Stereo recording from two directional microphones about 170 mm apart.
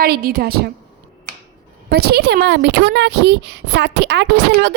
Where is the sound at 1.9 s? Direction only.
70° right (ahead or behind).